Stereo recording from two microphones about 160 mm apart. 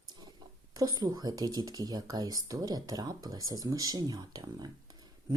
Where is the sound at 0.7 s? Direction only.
25° right (ahead or behind).